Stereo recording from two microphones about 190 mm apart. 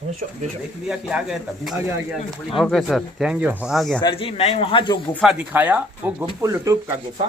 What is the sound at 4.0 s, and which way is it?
Speech, 25° left (ahead or behind).